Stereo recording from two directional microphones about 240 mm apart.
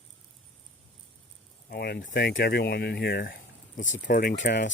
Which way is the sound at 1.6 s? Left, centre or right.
Left.